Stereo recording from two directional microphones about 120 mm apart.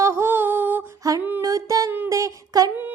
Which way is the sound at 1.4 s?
30° right (ahead or behind).